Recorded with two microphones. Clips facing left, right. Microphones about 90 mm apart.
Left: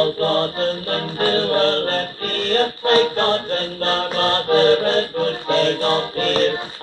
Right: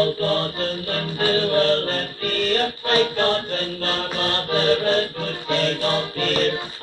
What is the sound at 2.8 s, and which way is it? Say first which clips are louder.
Mantra: left 4 dB; 35° left (ahead or behind).